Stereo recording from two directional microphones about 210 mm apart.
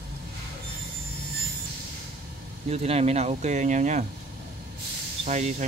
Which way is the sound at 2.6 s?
30° right (ahead or behind).